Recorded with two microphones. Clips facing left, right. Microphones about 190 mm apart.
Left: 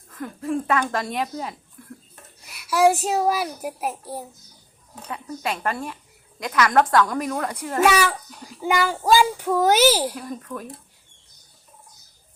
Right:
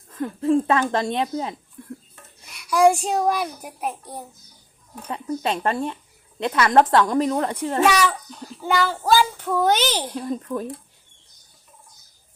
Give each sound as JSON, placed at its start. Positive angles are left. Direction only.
{"t": 0.1, "sound": "speech", "side_deg": -25}
{"t": 1.8, "sound": "stir", "side_deg": -25}
{"t": 2.5, "sound": "a child's voice", "side_deg": 5}
{"t": 5.0, "sound": "speech", "side_deg": -25}
{"t": 7.9, "sound": "a child's voice", "side_deg": 5}
{"t": 10.2, "sound": "speech", "side_deg": -30}